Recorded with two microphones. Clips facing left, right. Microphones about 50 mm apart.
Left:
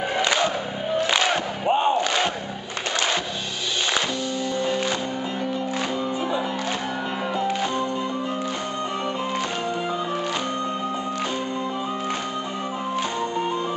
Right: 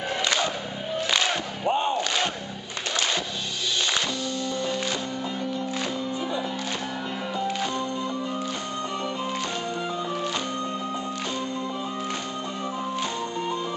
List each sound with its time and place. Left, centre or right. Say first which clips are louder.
0.1 s crowd: left 3 dB; centre
1.7 s battle cry: left 4 dB; left